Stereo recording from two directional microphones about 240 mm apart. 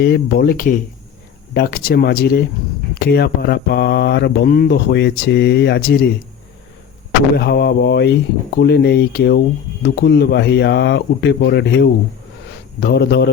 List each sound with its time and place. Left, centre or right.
0.0 s speech: left
7.3 s speech: left